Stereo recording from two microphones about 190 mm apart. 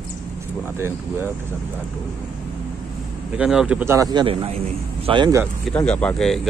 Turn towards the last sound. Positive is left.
turn(degrees=0)  # may be behind; listen again after turning